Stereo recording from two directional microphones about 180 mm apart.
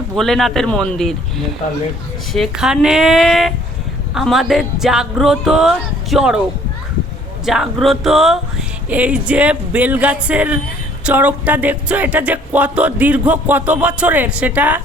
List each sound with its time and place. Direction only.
0.2 s speech: centre (ahead or behind)
7.4 s speech: centre (ahead or behind)